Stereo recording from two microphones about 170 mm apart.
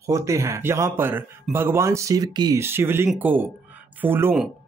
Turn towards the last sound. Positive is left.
turn(degrees=-15)  # may be behind; listen again after turning